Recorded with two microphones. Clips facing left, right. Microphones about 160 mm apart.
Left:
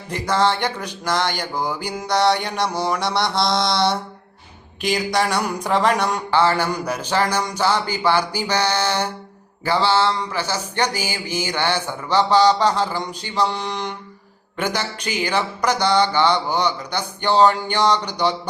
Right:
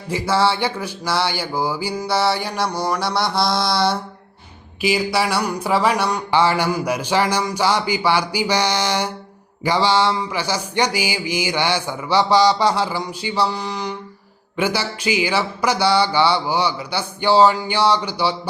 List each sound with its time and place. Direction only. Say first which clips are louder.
0.1 s mantra: right 1 dB; 10° right (ahead or behind)
2.8 s a sound: even; centre (ahead or behind)
6.3 s mantra: right 1 dB; 10° right (ahead or behind)